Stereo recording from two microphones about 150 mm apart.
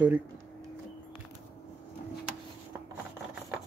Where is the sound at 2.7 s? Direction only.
15° right (ahead or behind).